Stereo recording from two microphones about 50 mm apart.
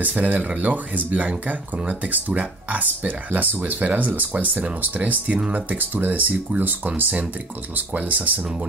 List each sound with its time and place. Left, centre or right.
0.0 s speech: right